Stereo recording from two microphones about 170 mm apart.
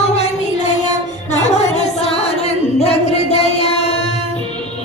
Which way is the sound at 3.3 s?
40° left (ahead or behind).